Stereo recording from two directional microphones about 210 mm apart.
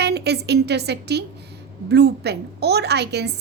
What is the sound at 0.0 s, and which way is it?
A woman's voice, 50° right (ahead or behind).